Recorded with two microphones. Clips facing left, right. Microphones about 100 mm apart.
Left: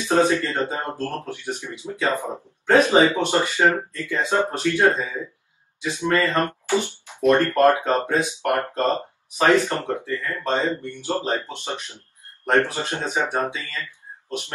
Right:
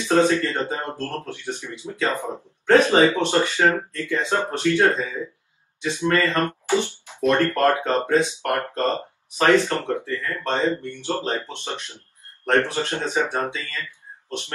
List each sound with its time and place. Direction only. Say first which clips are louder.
0.0 s speech: right 1 dB; 20° left (ahead or behind)